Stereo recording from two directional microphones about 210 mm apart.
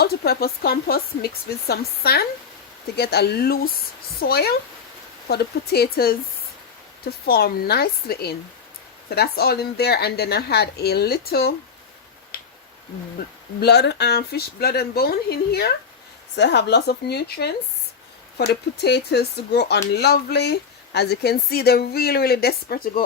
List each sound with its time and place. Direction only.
0.0 s speech: 50° left (ahead or behind)
13.6 s speech: 50° left (ahead or behind)
18.8 s speech: 55° left (ahead or behind)